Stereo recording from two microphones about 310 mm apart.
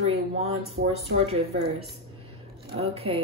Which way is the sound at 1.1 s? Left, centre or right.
Centre.